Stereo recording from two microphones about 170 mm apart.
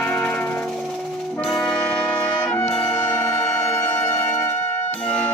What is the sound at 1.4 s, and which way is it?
Brass instrument, centre (ahead or behind).